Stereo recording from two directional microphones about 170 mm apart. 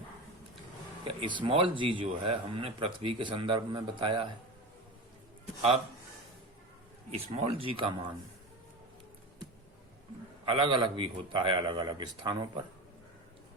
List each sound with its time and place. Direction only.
1.0 s speech: 30° right (ahead or behind)
7.1 s speech: 35° right (ahead or behind)
10.4 s speech: 35° right (ahead or behind)